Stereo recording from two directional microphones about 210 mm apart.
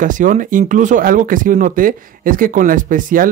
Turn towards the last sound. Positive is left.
turn(degrees=-40)  # may be behind; listen again after turning